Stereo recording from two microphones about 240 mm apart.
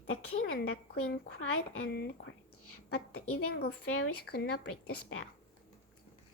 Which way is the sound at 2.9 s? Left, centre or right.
Left.